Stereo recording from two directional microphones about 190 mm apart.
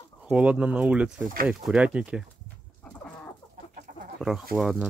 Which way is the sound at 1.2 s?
50° right (ahead or behind).